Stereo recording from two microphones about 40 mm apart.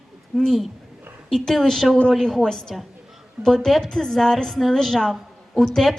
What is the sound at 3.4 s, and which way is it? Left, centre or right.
Speech, right.